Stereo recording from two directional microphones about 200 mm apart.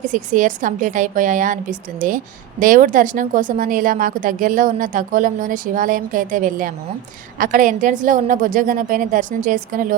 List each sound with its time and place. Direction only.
0.0 s a woman's voice: 40° right (ahead or behind)